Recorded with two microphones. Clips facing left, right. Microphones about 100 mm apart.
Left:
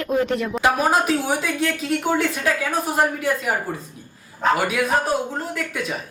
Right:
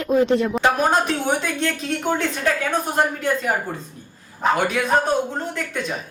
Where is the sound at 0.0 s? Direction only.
25° right (ahead or behind).